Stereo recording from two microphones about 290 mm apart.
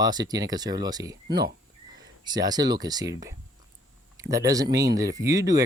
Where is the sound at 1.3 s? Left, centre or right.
Right.